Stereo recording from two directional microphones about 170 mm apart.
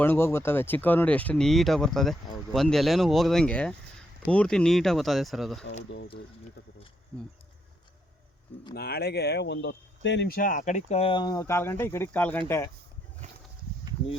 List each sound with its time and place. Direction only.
0.0 s speech: 15° left (ahead or behind)
7.1 s speech: 5° left (ahead or behind)
8.7 s speech: 70° left (ahead or behind); by 12.7 s 15° left (ahead or behind)